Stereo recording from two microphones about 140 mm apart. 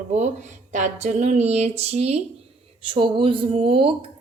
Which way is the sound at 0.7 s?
55° right (ahead or behind).